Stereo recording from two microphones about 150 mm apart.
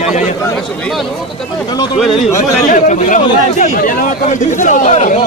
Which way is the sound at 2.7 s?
55° left (ahead or behind).